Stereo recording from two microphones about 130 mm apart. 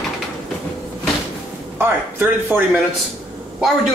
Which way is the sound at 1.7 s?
15° right (ahead or behind).